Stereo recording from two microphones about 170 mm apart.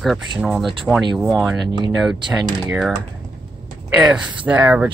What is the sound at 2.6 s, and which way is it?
Speech, 5° right (ahead or behind).